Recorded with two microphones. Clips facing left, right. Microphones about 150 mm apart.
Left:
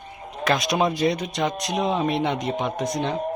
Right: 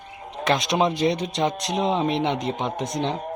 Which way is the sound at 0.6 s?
25° right (ahead or behind).